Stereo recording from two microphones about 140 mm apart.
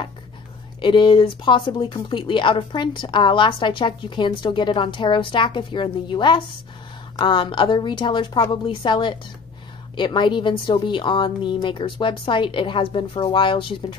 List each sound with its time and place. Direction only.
0.7 s speech: 35° left (ahead or behind)